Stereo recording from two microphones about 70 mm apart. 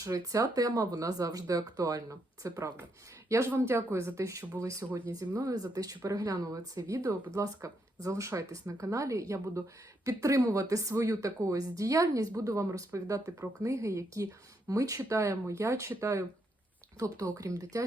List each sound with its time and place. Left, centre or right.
0.0 s speech: right
3.5 s speech: right
4.9 s speech: right
5.5 s speech: right
13.4 s speech: right
17.3 s speech: right